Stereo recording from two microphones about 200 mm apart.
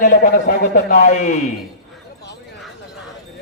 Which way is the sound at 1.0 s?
40° left (ahead or behind).